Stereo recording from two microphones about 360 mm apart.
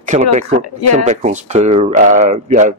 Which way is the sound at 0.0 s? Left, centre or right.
Centre.